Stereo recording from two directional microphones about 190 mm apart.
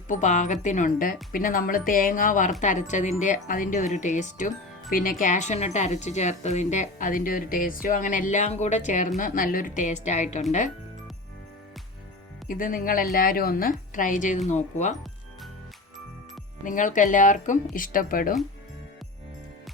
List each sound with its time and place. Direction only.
0.1 s speech: 40° left (ahead or behind)
12.5 s a woman's voice: 45° left (ahead or behind)
16.6 s a woman's voice: 40° left (ahead or behind)